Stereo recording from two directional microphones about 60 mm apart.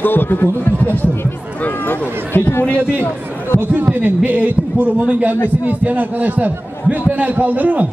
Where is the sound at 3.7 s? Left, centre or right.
Right.